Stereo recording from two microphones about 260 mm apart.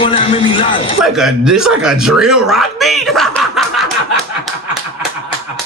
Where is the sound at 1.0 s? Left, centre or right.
Centre.